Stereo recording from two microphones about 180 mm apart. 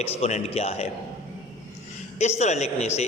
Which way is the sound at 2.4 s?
40° left (ahead or behind).